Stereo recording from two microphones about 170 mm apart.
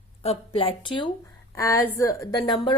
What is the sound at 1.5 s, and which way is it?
A woman's voice, 15° left (ahead or behind).